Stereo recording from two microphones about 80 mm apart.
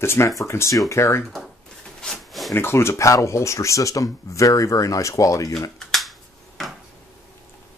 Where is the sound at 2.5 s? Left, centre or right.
Left.